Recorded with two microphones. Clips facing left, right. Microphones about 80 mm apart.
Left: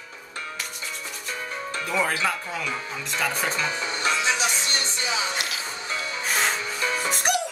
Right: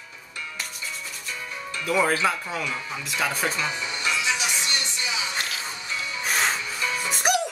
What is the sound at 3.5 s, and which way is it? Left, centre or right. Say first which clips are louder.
Music: left 1 dB; left.